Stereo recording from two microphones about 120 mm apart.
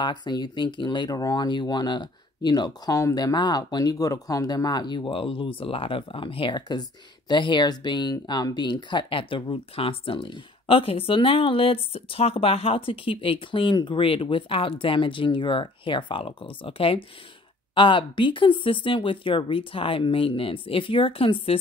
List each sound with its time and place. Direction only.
0.0 s speech: 40° left (ahead or behind)